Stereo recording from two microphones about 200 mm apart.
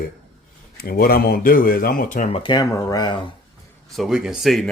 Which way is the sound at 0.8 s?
50° left (ahead or behind).